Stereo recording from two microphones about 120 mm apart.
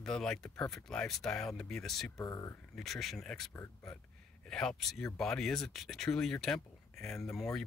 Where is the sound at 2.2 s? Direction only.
25° left (ahead or behind).